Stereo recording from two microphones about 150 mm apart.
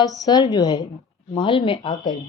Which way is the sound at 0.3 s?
30° left (ahead or behind).